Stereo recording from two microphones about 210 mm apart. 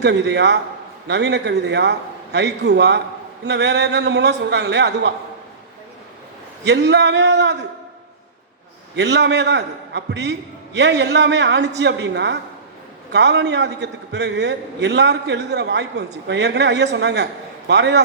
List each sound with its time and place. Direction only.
0.0 s a man's voice: 55° right (ahead or behind)
6.7 s a man's voice: 55° right (ahead or behind)
9.0 s a man's voice: 55° right (ahead or behind)